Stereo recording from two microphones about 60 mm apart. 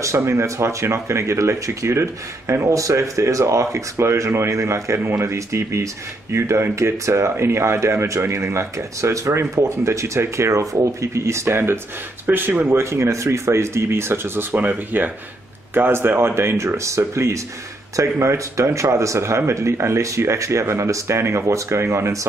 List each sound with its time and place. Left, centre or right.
0.0 s speech: right
4.9 s speech: right
5.3 s speech: right
12.7 s speech: right
14.6 s speech: right
15.7 s speech: right